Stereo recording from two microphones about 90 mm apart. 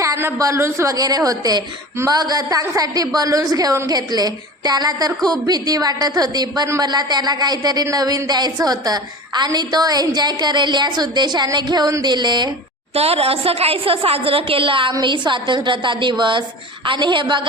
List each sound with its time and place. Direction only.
0.0 s speech: 30° right (ahead or behind)
0.9 s speech: 45° right (ahead or behind)
12.9 s a woman's voice: 90° right; by 14.9 s 70° right (ahead or behind)
15.0 s a woman's voice: 60° right (ahead or behind)